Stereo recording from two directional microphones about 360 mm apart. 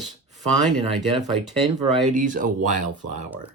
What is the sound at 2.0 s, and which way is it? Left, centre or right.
Speech, right.